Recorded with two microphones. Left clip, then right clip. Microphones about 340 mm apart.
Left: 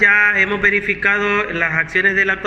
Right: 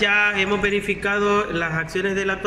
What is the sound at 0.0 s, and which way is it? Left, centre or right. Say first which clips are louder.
A man's voice: left 6 dB; centre.